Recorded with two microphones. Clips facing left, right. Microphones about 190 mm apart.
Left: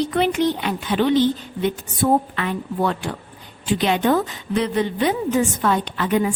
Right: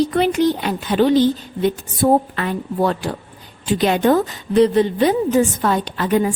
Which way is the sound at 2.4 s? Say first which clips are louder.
Right 3 dB; 40° right (ahead or behind).